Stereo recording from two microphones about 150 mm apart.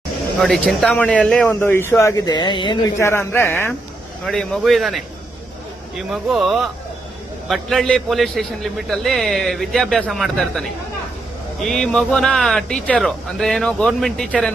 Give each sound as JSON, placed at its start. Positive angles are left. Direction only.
{"t": 0.3, "sound": "a man's voice", "side_deg": 0}
{"t": 3.0, "sound": "a man's voice", "side_deg": 15}
{"t": 4.3, "sound": "a man's voice", "side_deg": 5}
{"t": 6.1, "sound": "a man's voice", "side_deg": -5}
{"t": 11.7, "sound": "a man's voice", "side_deg": 5}